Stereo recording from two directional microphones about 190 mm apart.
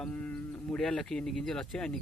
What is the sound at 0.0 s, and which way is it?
Speech, 5° left (ahead or behind).